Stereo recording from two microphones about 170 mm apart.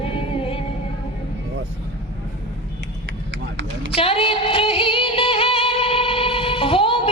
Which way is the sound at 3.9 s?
35° left (ahead or behind).